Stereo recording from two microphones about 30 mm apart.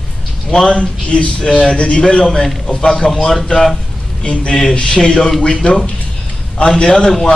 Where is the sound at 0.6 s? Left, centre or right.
Left.